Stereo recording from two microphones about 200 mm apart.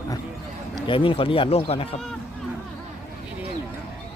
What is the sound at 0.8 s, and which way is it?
Speech, 25° left (ahead or behind).